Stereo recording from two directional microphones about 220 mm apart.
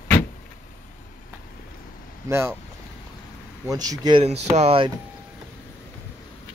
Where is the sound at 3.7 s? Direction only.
15° right (ahead or behind).